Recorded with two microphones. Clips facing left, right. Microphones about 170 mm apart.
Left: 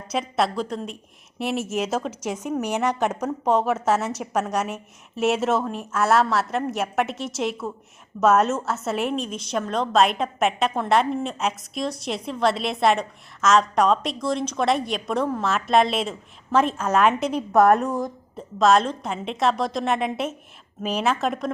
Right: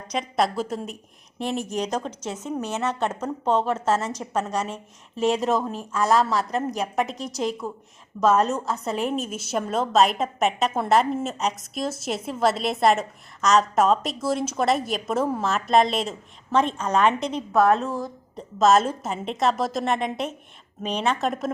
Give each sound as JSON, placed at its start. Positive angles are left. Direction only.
{"t": 0.1, "sound": "a woman's voice", "side_deg": 0}
{"t": 17.5, "sound": "a woman's voice", "side_deg": 15}
{"t": 18.3, "sound": "a woman's voice", "side_deg": 0}